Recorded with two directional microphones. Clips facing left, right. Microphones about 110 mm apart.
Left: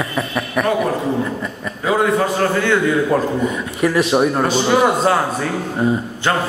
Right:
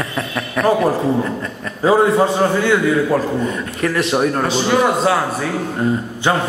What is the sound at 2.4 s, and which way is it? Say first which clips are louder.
Speech: right 2 dB; 15° right (ahead or behind).